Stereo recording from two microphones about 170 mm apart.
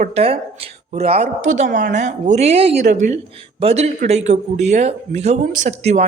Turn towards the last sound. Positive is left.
turn(degrees=-40)  # may be behind; listen again after turning